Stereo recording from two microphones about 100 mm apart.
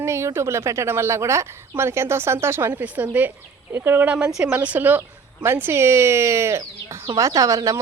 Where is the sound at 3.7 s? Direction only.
25° right (ahead or behind).